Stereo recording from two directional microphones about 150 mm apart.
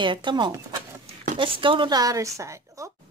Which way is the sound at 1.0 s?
55° right (ahead or behind).